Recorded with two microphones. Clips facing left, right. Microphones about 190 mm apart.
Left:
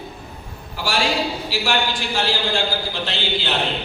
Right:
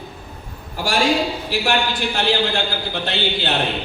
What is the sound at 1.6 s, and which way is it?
A man's voice, 60° right (ahead or behind).